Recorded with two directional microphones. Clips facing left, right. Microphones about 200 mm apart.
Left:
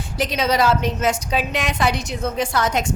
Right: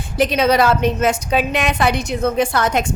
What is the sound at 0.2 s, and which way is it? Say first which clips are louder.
A woman's voice: right 5 dB; 60° right (ahead or behind).